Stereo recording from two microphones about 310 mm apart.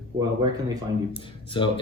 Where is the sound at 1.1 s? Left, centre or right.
Centre.